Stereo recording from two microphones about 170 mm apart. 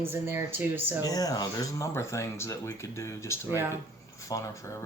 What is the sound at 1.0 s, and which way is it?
Speech, 20° left (ahead or behind).